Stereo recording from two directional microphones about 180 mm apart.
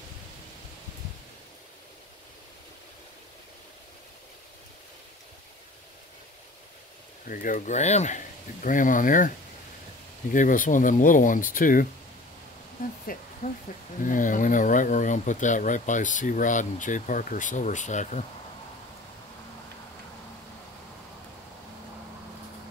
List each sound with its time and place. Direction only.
7.2 s speech: 45° left (ahead or behind)
10.3 s speech: 45° left (ahead or behind)
13.0 s a sound: 50° left (ahead or behind)
14.0 s speech: 45° left (ahead or behind)